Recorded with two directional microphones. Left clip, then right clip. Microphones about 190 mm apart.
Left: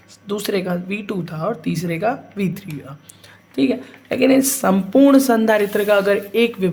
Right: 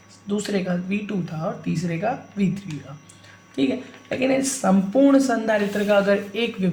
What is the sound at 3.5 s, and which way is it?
A woman's voice, 40° left (ahead or behind).